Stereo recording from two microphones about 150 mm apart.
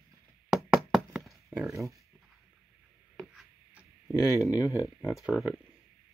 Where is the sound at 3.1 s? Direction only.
Centre (ahead or behind).